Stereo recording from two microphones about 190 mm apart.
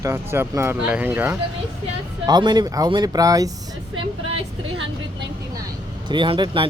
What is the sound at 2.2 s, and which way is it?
Speech, 20° right (ahead or behind).